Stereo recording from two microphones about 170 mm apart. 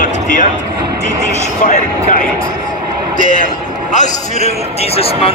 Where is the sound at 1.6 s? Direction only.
55° left (ahead or behind).